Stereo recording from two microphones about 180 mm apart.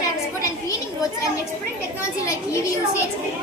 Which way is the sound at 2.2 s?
15° left (ahead or behind).